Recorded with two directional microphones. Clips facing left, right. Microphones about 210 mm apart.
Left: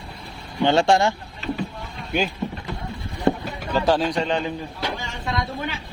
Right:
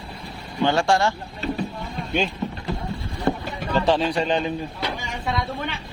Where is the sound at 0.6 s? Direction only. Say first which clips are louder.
Left 2 dB; 20° left (ahead or behind).